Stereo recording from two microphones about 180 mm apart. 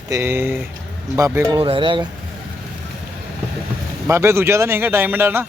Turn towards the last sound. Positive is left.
turn(degrees=-10)  # may be behind; listen again after turning